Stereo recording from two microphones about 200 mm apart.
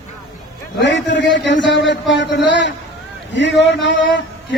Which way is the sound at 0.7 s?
65° left (ahead or behind).